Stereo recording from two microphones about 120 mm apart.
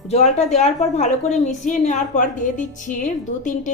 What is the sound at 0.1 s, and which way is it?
A woman's voice, 65° left (ahead or behind).